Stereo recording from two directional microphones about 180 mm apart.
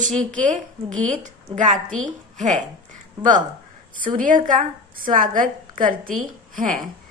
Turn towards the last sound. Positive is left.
turn(degrees=-45)  # may be behind; listen again after turning